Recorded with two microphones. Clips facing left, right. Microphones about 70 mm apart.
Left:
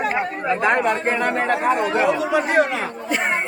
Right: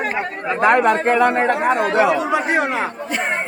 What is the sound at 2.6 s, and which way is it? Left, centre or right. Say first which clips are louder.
Speech: left 1 dB; centre.